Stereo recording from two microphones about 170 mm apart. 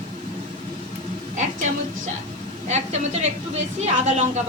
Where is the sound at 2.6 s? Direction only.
40° right (ahead or behind).